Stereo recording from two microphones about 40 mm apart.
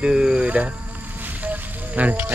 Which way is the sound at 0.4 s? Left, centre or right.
Right.